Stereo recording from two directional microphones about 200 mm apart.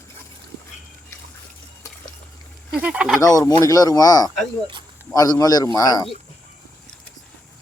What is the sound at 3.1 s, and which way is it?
Speech, 15° left (ahead or behind).